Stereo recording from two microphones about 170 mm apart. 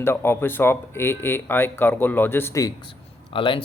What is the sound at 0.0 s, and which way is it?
Speech, 15° left (ahead or behind).